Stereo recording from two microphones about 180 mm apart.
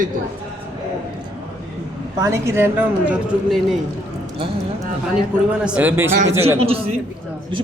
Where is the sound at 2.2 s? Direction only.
15° right (ahead or behind).